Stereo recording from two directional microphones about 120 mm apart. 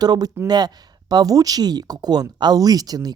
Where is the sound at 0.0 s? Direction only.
35° right (ahead or behind).